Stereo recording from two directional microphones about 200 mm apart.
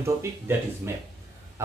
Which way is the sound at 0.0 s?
15° right (ahead or behind).